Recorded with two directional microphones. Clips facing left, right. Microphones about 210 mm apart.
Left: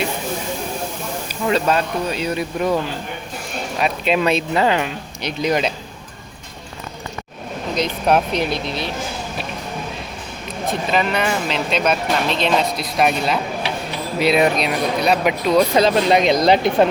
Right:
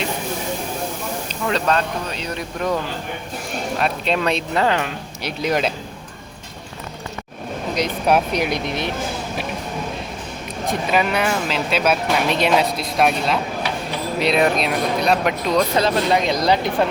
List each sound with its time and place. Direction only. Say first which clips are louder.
1.5 s speech: left 2 dB; 10° left (ahead or behind)
3.8 s speech: left 3 dB; 5° left (ahead or behind)
7.8 s speech: left 1 dB; 10° right (ahead or behind)
10.7 s speech: even; 10° right (ahead or behind)
15.7 s speech: left 3 dB; 15° left (ahead or behind)